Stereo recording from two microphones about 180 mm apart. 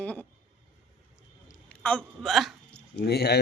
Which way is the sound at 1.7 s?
5° left (ahead or behind).